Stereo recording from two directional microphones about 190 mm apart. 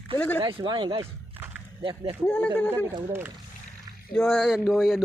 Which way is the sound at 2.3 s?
5° left (ahead or behind).